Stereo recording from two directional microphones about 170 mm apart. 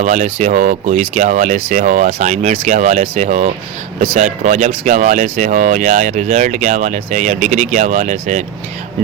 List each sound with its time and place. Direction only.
0.0 s speech: 45° right (ahead or behind)